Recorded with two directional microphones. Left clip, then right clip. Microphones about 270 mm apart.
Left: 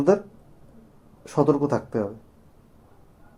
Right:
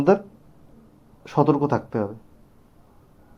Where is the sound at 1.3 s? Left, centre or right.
Centre.